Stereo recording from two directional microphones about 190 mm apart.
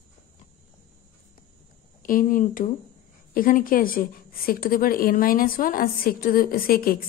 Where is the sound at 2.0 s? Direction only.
45° left (ahead or behind).